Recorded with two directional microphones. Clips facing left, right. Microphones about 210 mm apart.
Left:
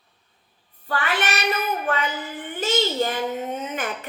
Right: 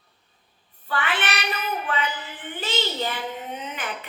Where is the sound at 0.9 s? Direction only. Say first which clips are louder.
Left 2 dB; 40° left (ahead or behind).